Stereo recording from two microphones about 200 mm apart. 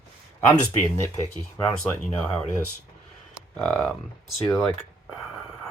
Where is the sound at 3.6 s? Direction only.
5° left (ahead or behind).